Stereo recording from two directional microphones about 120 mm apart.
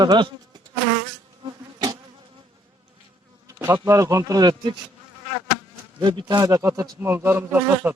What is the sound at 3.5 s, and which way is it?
Insect, 25° right (ahead or behind).